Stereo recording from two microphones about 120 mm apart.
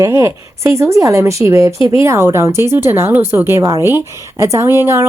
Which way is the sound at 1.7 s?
45° left (ahead or behind).